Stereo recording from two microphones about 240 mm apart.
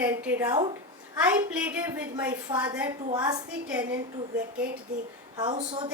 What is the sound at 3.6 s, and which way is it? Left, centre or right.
Speech, centre.